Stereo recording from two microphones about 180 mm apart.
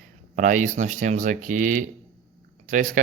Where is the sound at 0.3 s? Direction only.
45° right (ahead or behind).